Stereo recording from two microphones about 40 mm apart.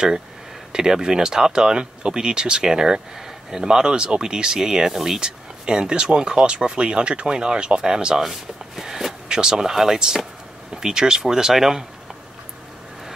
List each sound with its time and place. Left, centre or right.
0.7 s speech: centre